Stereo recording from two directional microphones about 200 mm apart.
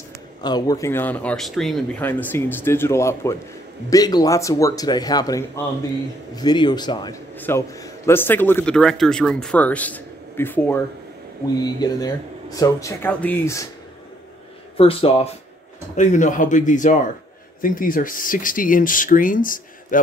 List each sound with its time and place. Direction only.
0.4 s speech: 20° left (ahead or behind)
7.3 s speech: 10° left (ahead or behind)
11.8 s speech: 20° left (ahead or behind)
14.8 s speech: 30° left (ahead or behind)